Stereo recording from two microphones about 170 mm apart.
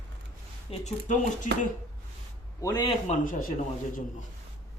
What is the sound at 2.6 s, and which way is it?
Speech, 25° left (ahead or behind).